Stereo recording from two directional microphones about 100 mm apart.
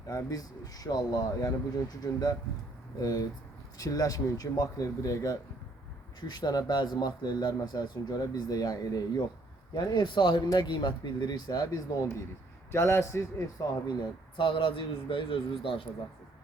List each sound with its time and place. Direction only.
0.1 s speech: 35° left (ahead or behind)
12.7 s a man's voice: 25° left (ahead or behind)
13.6 s speech: 40° left (ahead or behind)
14.3 s a man's voice: 55° left (ahead or behind)